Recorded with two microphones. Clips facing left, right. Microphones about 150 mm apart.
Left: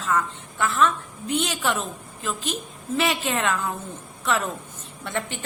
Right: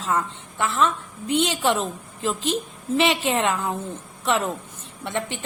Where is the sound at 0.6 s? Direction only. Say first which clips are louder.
Even; 20° right (ahead or behind).